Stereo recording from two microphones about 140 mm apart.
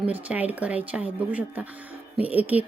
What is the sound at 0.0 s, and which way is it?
A woman's voice, 10° right (ahead or behind).